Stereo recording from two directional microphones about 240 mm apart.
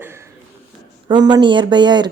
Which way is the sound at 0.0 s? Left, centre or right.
Centre.